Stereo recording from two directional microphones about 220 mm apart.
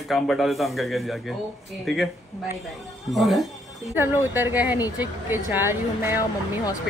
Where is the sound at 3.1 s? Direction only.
Centre (ahead or behind).